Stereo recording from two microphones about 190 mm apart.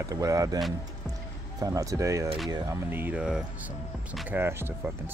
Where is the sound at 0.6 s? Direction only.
Centre (ahead or behind).